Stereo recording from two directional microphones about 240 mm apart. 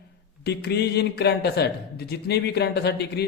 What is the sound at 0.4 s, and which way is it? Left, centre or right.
Speech, left.